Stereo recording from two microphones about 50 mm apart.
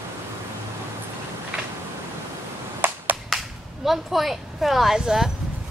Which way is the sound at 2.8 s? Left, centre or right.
Right.